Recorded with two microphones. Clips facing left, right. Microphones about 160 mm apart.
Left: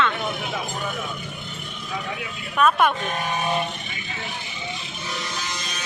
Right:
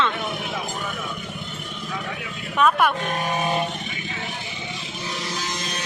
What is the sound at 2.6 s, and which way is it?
Speech, 15° right (ahead or behind).